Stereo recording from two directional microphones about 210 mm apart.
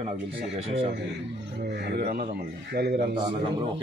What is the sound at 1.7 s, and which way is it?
Speech, 50° right (ahead or behind).